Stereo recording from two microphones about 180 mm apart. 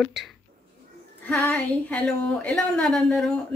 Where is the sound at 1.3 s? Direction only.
10° left (ahead or behind).